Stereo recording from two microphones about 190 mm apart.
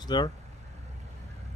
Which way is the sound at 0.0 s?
20° left (ahead or behind).